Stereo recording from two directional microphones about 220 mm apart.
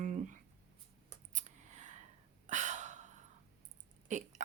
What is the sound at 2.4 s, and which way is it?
Gasp, 35° right (ahead or behind).